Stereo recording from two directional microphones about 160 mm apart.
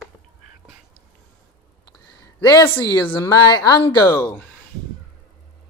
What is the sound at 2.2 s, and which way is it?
Speech, 25° left (ahead or behind).